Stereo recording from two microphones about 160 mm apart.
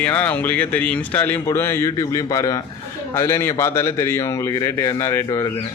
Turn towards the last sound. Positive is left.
turn(degrees=25)  # may be behind; listen again after turning